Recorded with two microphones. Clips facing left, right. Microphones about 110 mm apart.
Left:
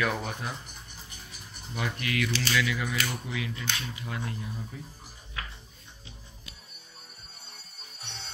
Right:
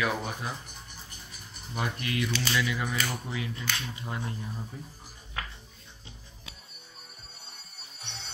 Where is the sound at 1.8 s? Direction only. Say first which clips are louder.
Even; 30° right (ahead or behind).